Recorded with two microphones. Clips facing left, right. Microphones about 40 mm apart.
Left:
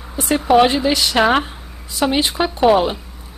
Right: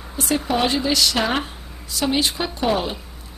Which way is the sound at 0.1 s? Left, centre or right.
Centre.